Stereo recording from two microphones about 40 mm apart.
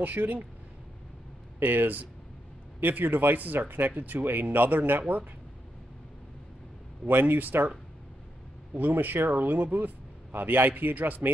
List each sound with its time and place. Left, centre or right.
0.0 s a man's voice: right
1.6 s a man's voice: right
7.1 s a man's voice: right
8.9 s a man's voice: right